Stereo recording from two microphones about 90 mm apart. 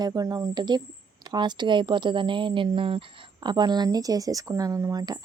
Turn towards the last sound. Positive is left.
turn(degrees=-45)  # may be behind; listen again after turning